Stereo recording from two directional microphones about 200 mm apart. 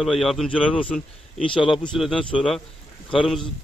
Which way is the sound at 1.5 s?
Centre (ahead or behind).